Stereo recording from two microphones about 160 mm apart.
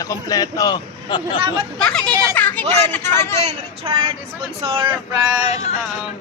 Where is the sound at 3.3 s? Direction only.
40° right (ahead or behind).